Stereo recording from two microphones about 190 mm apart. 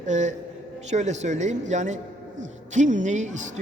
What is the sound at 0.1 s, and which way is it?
Speech, 40° right (ahead or behind).